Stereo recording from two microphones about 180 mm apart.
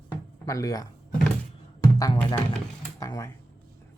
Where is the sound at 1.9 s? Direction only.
20° left (ahead or behind).